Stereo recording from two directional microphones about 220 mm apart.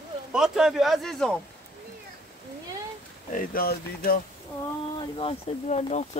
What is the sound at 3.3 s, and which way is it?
Speech, 40° left (ahead or behind).